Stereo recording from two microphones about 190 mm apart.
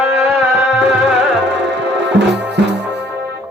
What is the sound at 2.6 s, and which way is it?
Music, 65° right (ahead or behind).